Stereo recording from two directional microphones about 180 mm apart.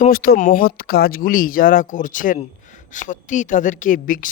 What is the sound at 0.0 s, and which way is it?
A man's voice, 55° left (ahead or behind).